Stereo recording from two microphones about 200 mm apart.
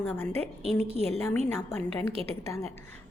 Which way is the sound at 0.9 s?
30° right (ahead or behind).